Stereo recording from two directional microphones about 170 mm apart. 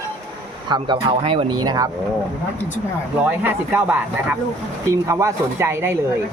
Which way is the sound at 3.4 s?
10° right (ahead or behind).